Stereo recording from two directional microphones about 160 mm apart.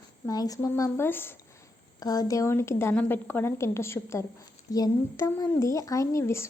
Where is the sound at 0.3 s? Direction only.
20° left (ahead or behind).